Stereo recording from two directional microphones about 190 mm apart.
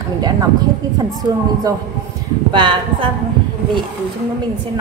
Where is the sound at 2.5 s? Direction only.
25° right (ahead or behind).